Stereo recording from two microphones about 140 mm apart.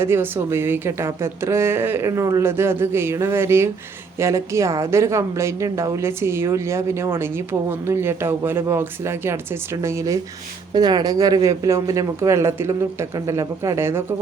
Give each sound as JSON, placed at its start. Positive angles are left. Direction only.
{"t": 0.0, "sound": "speech", "side_deg": -15}